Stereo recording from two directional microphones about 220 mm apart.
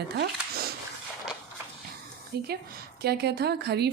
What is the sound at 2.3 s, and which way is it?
Speech, 45° right (ahead or behind).